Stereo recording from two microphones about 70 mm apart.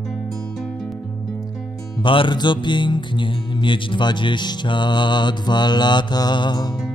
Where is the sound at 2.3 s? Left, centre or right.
Left.